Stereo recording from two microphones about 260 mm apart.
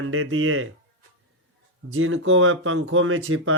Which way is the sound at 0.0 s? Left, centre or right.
Right.